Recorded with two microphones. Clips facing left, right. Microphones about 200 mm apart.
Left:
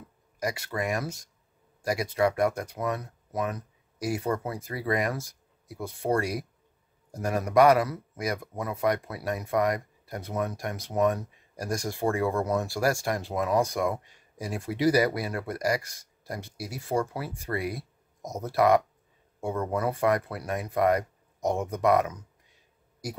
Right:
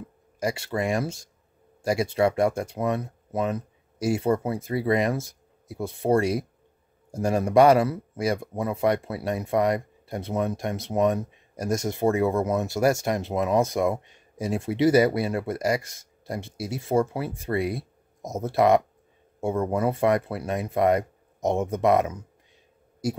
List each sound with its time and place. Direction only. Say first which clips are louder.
0.4 s speech: right 4 dB; 25° right (ahead or behind)